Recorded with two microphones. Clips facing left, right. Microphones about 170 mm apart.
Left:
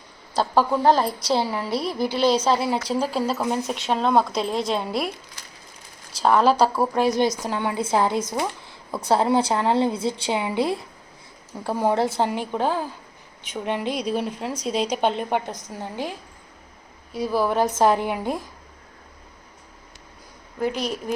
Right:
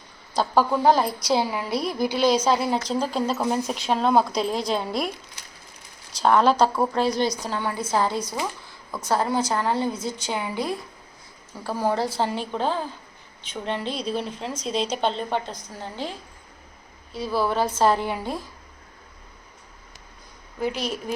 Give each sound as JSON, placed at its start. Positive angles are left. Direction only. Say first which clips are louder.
{"t": 0.5, "sound": "speech", "louder": "even", "side_deg": -5}
{"t": 1.7, "sound": "a woman's voice", "louder": "even", "side_deg": 30}
{"t": 2.4, "sound": "speech", "louder": "even", "side_deg": 5}
{"t": 6.2, "sound": "a woman's voice", "louder": "left 1 dB", "side_deg": 5}
{"t": 20.7, "sound": "speech", "louder": "left 2 dB", "side_deg": 35}